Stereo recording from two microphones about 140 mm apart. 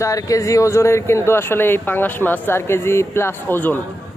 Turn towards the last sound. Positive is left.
turn(degrees=15)  # may be behind; listen again after turning